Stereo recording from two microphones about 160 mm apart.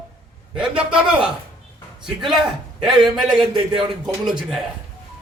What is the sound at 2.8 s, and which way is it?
Speech, centre (ahead or behind).